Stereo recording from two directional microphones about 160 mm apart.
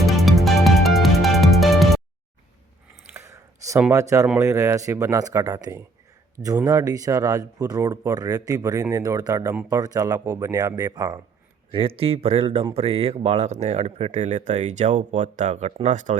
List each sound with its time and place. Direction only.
0.0 s music: centre (ahead or behind)
3.2 s a sound: 20° right (ahead or behind)
3.9 s speech: 20° right (ahead or behind)
11.7 s speech: 35° right (ahead or behind)